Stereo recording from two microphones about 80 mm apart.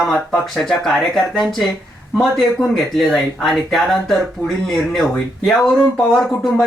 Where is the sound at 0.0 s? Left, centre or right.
Centre.